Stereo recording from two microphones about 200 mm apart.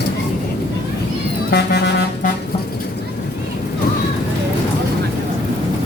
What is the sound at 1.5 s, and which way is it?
Music, 55° left (ahead or behind).